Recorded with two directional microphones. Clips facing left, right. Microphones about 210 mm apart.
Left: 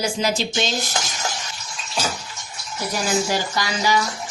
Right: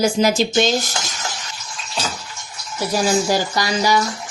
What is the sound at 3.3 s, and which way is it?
Speech, 40° right (ahead or behind).